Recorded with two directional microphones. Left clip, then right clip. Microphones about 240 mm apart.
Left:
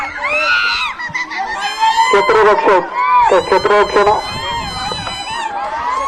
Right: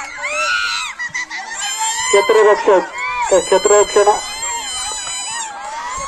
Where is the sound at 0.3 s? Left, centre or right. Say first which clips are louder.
Left 4 dB; right.